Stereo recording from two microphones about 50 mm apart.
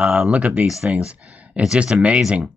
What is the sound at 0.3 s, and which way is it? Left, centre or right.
Speech, right.